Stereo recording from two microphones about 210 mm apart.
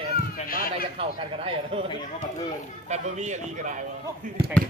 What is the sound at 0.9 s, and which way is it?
Speech, 25° right (ahead or behind).